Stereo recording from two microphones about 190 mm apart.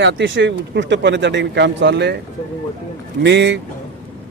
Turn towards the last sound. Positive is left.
turn(degrees=-70)  # may be behind; listen again after turning